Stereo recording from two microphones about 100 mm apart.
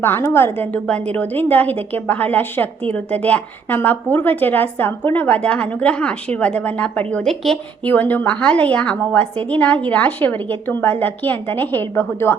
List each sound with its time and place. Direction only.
0.0 s a woman's voice: 25° left (ahead or behind); by 7.6 s 5° left (ahead or behind)
7.9 s a woman's voice: 15° left (ahead or behind)